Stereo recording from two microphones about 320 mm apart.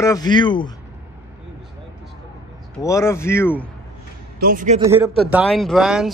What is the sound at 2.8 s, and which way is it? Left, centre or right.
Speech, centre.